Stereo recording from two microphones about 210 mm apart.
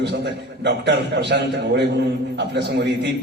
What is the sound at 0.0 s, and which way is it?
A man's voice, 55° right (ahead or behind).